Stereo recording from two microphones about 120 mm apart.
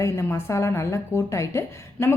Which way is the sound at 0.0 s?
20° left (ahead or behind).